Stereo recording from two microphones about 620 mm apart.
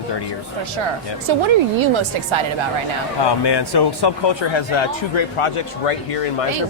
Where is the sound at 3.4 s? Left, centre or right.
Left.